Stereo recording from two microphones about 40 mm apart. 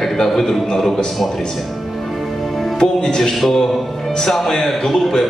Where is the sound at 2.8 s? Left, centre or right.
Centre.